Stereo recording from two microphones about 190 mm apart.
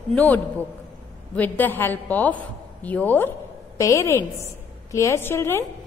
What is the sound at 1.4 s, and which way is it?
A woman's voice, 10° left (ahead or behind).